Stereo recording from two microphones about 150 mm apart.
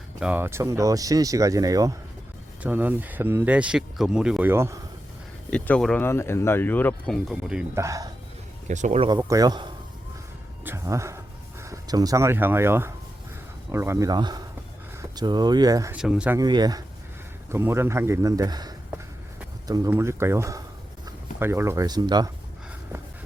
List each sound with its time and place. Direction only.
0.2 s speech: 10° right (ahead or behind)
2.6 s speech: 10° right (ahead or behind)
5.5 s speech: 10° left (ahead or behind)
7.8 s speech: 20° right (ahead or behind)
8.6 s speech: 50° right (ahead or behind)
9.0 s speech: 25° right (ahead or behind)
10.6 s speech: 15° right (ahead or behind)
15.9 s speech: 5° right (ahead or behind)
16.4 s speech: 25° right (ahead or behind)
17.5 s speech: 15° right (ahead or behind)